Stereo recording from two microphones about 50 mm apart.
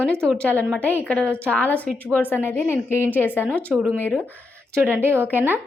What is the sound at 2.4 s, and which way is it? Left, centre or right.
A woman's voice, left.